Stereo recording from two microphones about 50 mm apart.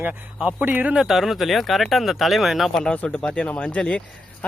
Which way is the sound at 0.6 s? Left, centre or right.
Right.